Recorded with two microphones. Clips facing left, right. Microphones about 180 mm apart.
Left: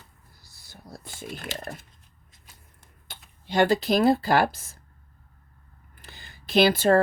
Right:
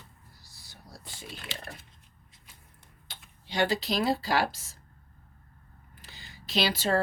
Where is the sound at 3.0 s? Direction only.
50° left (ahead or behind).